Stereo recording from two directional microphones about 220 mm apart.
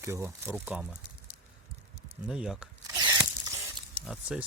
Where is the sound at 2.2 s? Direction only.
5° right (ahead or behind).